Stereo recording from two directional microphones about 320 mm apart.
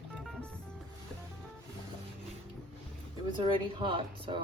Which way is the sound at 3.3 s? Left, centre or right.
Centre.